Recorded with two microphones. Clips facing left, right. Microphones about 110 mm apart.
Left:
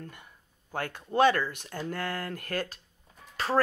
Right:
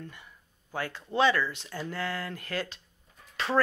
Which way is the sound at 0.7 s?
50° left (ahead or behind).